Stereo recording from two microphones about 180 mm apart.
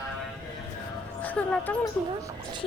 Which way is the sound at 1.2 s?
5° left (ahead or behind).